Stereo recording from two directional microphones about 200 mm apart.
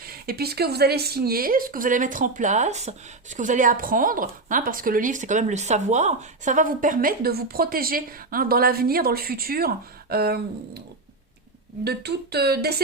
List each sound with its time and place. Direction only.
0.0 s speech: 50° right (ahead or behind)
11.9 s speech: 55° right (ahead or behind)